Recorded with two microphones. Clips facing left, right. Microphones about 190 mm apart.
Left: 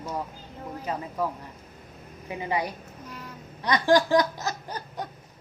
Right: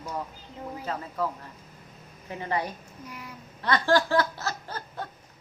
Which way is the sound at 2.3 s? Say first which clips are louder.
Left 1 dB; 10° left (ahead or behind).